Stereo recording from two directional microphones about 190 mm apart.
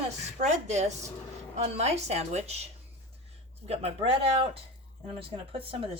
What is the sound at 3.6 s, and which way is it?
Speech, 30° right (ahead or behind).